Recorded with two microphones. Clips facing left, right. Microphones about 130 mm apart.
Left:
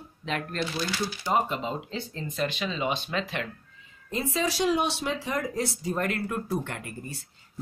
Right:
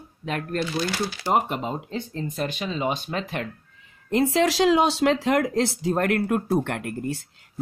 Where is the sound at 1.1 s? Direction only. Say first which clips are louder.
Right 2 dB; 80° right; by 3.5 s 50° right (ahead or behind).